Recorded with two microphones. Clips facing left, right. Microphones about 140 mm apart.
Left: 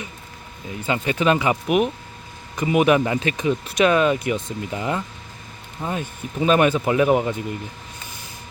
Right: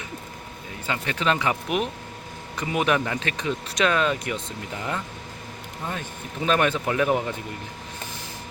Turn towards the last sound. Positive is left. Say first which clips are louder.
# left 5 dB
turn(degrees=15)  # may be behind; listen again after turning